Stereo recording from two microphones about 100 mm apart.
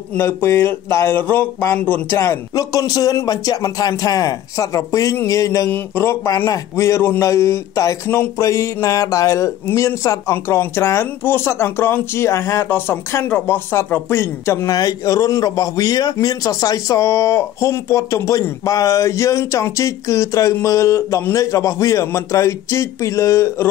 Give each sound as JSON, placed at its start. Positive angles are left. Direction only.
{"t": 0.1, "sound": "a man's voice", "side_deg": 20}
{"t": 2.5, "sound": "a man's voice", "side_deg": 35}